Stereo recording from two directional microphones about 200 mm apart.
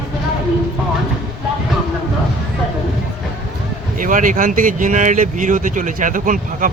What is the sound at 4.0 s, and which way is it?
Speech, 40° right (ahead or behind).